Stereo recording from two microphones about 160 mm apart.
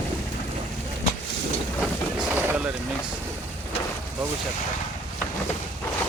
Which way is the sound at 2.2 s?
10° right (ahead or behind).